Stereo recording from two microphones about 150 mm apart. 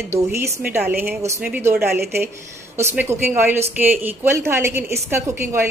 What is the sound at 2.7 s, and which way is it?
A woman's voice, 15° right (ahead or behind).